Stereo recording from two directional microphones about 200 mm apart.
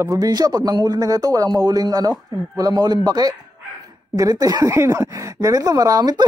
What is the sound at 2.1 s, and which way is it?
Speech, centre (ahead or behind).